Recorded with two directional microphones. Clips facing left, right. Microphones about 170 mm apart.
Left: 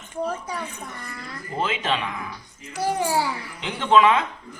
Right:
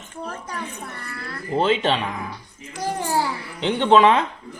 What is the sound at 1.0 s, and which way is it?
Speech, 15° left (ahead or behind).